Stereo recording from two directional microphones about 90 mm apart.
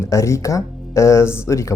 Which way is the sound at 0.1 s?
35° left (ahead or behind).